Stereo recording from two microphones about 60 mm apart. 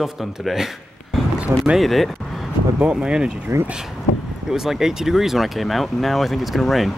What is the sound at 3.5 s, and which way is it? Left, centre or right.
Speech, right.